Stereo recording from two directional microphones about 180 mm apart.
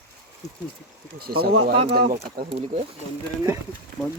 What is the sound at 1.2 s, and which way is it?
Speech, 60° right (ahead or behind).